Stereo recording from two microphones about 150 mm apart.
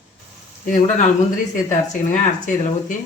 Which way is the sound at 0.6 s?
60° left (ahead or behind).